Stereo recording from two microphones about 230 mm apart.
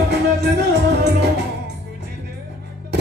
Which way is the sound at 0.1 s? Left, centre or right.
Right.